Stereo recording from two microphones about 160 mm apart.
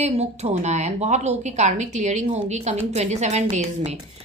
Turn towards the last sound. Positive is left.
turn(degrees=-45)  # may be behind; listen again after turning